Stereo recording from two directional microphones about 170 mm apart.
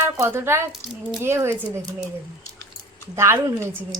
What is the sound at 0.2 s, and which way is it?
Speech, 15° right (ahead or behind).